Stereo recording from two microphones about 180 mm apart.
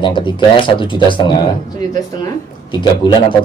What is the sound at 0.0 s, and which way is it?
A woman's voice, 25° left (ahead or behind).